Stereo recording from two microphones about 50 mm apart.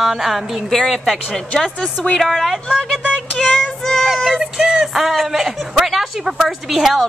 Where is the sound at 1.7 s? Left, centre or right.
Left.